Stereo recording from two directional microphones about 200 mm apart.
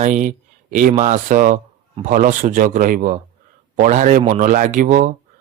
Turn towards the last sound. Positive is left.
turn(degrees=-40)  # may be behind; listen again after turning